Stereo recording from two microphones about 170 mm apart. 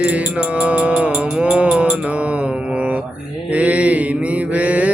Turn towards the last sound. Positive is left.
turn(degrees=-10)  # may be behind; listen again after turning